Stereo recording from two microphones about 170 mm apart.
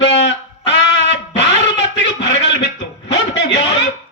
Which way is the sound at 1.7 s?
90° left.